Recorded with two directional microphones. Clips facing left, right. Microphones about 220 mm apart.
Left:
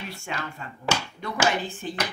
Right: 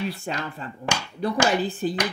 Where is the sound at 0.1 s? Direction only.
35° right (ahead or behind).